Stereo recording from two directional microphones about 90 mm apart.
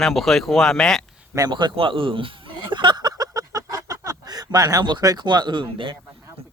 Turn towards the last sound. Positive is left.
turn(degrees=-65)  # may be behind; listen again after turning